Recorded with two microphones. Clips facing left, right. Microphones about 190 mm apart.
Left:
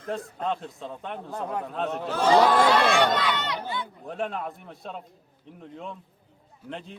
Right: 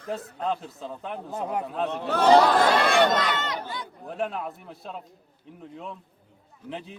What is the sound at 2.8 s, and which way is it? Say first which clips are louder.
Speech: right 1 dB; 45° right (ahead or behind).